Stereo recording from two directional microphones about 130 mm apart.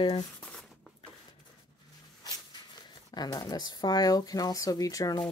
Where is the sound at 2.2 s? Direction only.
30° left (ahead or behind).